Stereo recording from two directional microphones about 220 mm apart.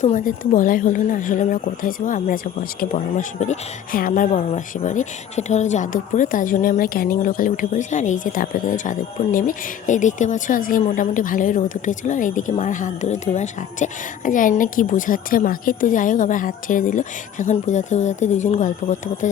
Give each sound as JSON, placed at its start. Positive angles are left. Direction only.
{"t": 0.0, "sound": "a woman's voice", "side_deg": 35}